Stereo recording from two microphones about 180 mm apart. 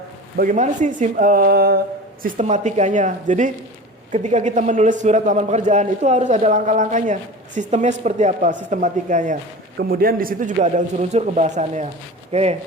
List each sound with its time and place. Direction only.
0.3 s a man's voice: 45° right (ahead or behind)
2.2 s a man's voice: 40° right (ahead or behind)
9.7 s a man's voice: 55° right (ahead or behind); by 12.5 s 35° right (ahead or behind)